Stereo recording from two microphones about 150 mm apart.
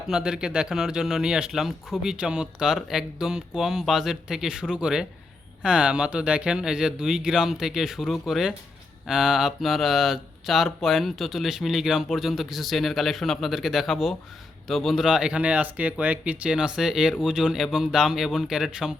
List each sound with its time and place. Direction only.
0.1 s speech: 5° right (ahead or behind)